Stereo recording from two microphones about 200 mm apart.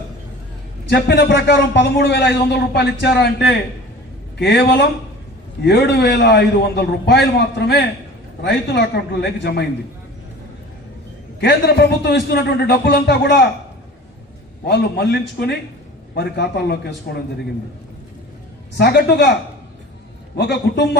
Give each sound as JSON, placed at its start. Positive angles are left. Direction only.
{"t": 0.9, "sound": "a man's voice", "side_deg": 55}
{"t": 4.4, "sound": "a man's voice", "side_deg": 55}
{"t": 9.2, "sound": "a man's voice", "side_deg": 55}
{"t": 11.3, "sound": "a man's voice", "side_deg": 55}
{"t": 14.6, "sound": "a man's voice", "side_deg": 50}
{"t": 18.8, "sound": "a man's voice", "side_deg": 55}
{"t": 20.4, "sound": "a man's voice", "side_deg": 60}